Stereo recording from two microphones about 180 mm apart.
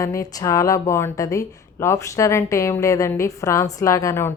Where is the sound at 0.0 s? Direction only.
20° left (ahead or behind).